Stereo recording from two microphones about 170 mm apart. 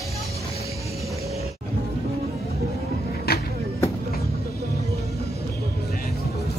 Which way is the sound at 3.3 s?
65° left (ahead or behind).